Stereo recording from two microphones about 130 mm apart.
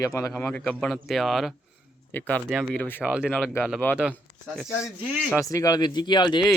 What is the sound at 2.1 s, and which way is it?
Speech, 15° left (ahead or behind).